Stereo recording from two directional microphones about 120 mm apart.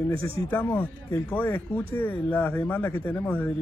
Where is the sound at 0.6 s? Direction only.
15° left (ahead or behind).